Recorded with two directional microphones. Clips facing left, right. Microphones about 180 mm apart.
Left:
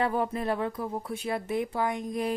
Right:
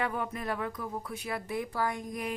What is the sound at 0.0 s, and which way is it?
A woman's voice, 30° left (ahead or behind).